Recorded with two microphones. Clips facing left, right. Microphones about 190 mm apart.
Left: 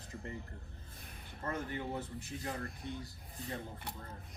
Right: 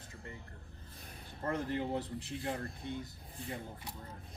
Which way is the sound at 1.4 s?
30° right (ahead or behind).